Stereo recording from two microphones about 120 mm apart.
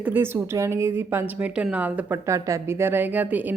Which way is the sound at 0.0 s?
15° right (ahead or behind).